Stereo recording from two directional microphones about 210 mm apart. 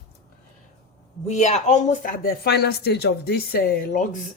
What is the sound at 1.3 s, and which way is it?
Speech, 35° left (ahead or behind).